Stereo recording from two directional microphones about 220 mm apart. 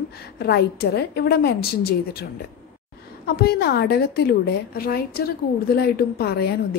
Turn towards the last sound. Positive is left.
turn(degrees=45)  # may be behind; listen again after turning